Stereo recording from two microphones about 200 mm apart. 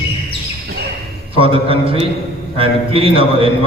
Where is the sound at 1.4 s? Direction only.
25° right (ahead or behind).